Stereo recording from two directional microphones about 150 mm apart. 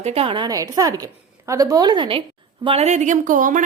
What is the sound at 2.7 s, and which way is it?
Speech, 45° right (ahead or behind).